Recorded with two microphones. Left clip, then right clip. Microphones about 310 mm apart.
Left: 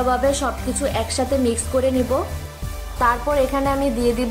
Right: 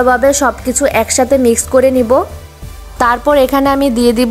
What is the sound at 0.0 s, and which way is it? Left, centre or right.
A woman's voice, right.